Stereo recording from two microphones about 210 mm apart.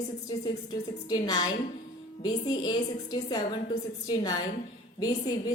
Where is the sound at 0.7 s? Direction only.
20° left (ahead or behind).